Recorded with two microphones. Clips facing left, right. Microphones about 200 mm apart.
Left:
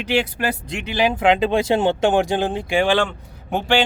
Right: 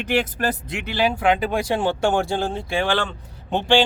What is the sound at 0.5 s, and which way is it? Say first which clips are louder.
Speech: left 2 dB; 15° left (ahead or behind).